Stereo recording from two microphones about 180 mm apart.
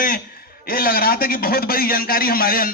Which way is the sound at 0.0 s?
55° left (ahead or behind).